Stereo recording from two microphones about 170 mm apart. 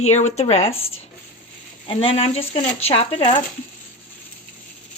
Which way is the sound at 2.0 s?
35° left (ahead or behind).